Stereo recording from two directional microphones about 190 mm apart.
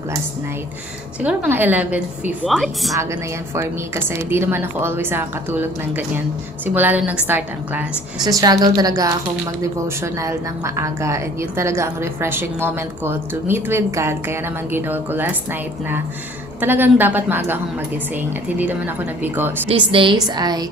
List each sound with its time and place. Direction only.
1.2 s a woman's voice: 10° right (ahead or behind)
3.0 s speech: 15° right (ahead or behind)
8.2 s speech: 20° right (ahead or behind)
16.6 s speech: 10° right (ahead or behind)
19.7 s a woman's voice: 25° right (ahead or behind)